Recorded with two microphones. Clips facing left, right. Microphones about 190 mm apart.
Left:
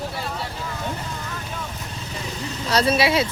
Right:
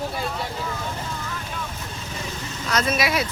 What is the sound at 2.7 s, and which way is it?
Speech, 35° left (ahead or behind).